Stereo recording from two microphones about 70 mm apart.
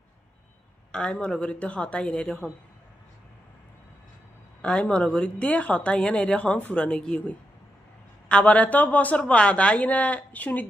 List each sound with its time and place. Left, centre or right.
0.9 s speech: centre
4.6 s a woman's voice: centre